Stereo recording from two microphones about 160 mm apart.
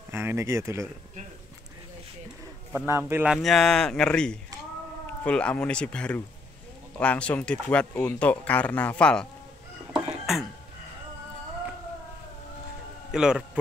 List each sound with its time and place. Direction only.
0.1 s speech: 15° right (ahead or behind)
2.9 s speech: 15° right (ahead or behind)
3.3 s speech: centre (ahead or behind)
9.9 s a sound: 5° right (ahead or behind)
13.1 s a man's voice: 5° right (ahead or behind)